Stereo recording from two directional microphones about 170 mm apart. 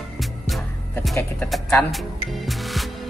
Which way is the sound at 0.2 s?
Centre (ahead or behind).